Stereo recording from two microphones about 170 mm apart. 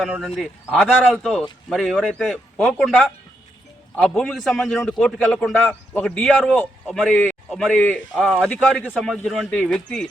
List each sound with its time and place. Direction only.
0.0 s a man's voice: 5° right (ahead or behind)
3.9 s a man's voice: 5° left (ahead or behind)
9.2 s a man's voice: centre (ahead or behind)